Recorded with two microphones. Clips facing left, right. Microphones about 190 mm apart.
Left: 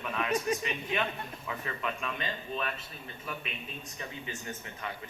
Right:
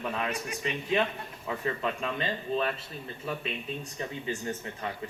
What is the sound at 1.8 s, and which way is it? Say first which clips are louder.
Speech: right 1 dB; 30° right (ahead or behind).